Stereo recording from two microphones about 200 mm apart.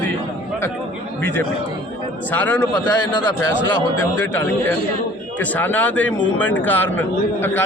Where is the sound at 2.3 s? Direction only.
10° left (ahead or behind).